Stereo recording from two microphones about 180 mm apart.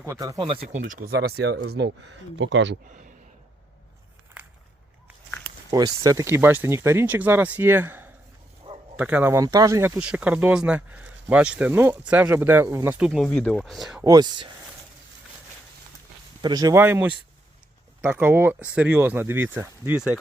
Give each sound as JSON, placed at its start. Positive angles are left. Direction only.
{"t": 0.0, "sound": "speech", "side_deg": -15}
{"t": 0.9, "sound": "speech", "side_deg": -50}
{"t": 5.7, "sound": "speech", "side_deg": -20}
{"t": 8.7, "sound": "bow-wow", "side_deg": -35}
{"t": 9.0, "sound": "speech", "side_deg": -10}
{"t": 10.0, "sound": "speech", "side_deg": -5}
{"t": 14.0, "sound": "speech", "side_deg": -20}
{"t": 16.4, "sound": "speech", "side_deg": -20}